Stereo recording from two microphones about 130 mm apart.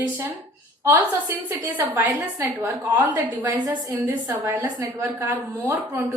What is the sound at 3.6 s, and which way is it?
Speech, 30° right (ahead or behind).